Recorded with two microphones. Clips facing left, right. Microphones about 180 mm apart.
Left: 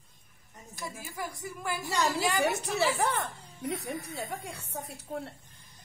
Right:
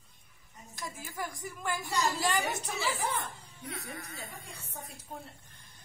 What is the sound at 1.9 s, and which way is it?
A woman's voice, 70° left (ahead or behind).